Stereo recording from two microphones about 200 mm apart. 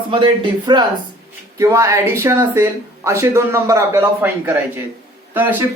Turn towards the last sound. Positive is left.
turn(degrees=-10)  # may be behind; listen again after turning